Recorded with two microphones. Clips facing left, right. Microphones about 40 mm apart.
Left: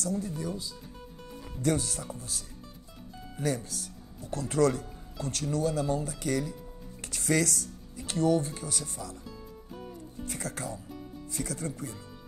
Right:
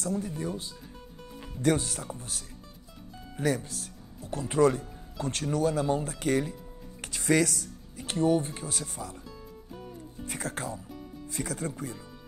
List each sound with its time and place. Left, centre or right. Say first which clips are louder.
0.2 s speech: right 1 dB; right
5.2 s speech: right 2 dB; right
10.2 s speech: right 2 dB; right